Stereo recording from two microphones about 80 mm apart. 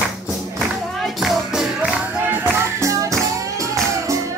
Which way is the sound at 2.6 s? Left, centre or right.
Right.